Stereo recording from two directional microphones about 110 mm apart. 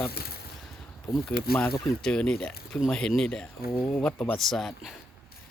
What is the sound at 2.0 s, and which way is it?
Speech, 10° left (ahead or behind).